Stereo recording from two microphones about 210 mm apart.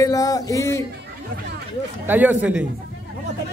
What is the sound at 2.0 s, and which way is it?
Speech, 10° right (ahead or behind).